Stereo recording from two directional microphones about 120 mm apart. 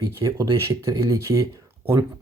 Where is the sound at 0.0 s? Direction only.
25° right (ahead or behind).